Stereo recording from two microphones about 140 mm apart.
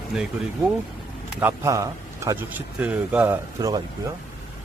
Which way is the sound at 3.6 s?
25° right (ahead or behind).